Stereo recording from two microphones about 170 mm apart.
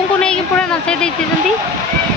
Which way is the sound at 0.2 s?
5° left (ahead or behind).